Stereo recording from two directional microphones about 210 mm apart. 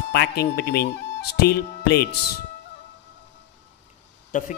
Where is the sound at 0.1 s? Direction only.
50° left (ahead or behind).